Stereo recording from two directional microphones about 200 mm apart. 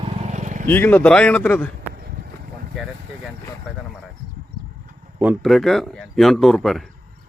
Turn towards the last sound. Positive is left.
turn(degrees=0)  # may be behind; listen again after turning